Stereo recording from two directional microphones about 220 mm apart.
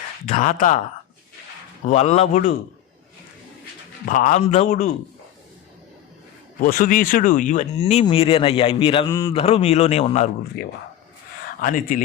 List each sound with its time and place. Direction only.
0.3 s a man's voice: 35° left (ahead or behind)
1.9 s a man's voice: 30° left (ahead or behind)
4.0 s a man's voice: 35° left (ahead or behind)
6.6 s speech: 40° left (ahead or behind); by 9.3 s 15° left (ahead or behind)
9.3 s speech: 25° left (ahead or behind)
11.6 s a man's voice: 40° left (ahead or behind)